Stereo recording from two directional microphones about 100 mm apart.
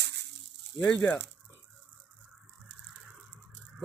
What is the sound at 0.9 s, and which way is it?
Speech, 20° left (ahead or behind).